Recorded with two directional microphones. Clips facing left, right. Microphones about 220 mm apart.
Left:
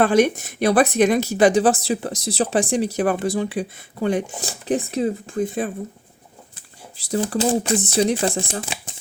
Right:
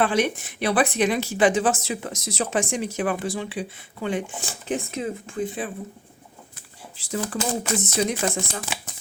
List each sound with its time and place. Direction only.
0.0 s speech: 45° left (ahead or behind)
7.2 s speech: 35° left (ahead or behind)